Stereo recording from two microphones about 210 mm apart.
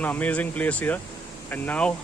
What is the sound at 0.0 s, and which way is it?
Speech, 5° left (ahead or behind).